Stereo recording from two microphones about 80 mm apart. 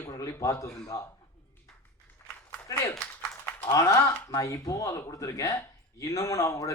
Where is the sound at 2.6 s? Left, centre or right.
Left.